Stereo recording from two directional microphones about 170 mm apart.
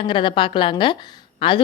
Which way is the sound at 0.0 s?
30° left (ahead or behind).